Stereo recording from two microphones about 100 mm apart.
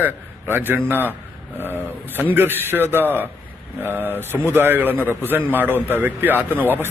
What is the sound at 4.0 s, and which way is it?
Speech, 20° left (ahead or behind).